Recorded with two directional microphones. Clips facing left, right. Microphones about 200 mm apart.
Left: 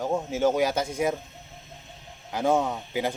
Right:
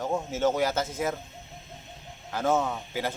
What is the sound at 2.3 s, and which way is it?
Speech, 15° left (ahead or behind).